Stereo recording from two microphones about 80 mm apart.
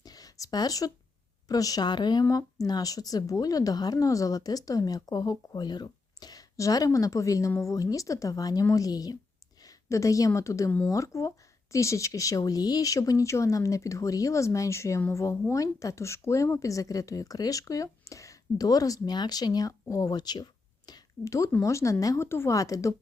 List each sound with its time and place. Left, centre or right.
0.0 s a sound: left
1.5 s a woman's voice: left
2.3 s a woman's voice: left
9.6 s a woman's voice: left
21.2 s a woman's voice: left
22.3 s speech: left
22.5 s a woman's voice: left